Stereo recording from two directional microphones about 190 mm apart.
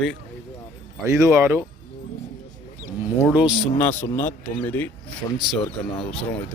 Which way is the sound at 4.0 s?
10° left (ahead or behind).